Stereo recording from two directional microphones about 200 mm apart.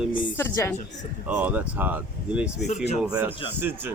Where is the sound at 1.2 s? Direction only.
5° right (ahead or behind).